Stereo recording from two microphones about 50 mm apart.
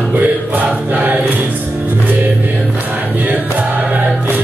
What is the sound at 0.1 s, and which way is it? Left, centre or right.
Music, right.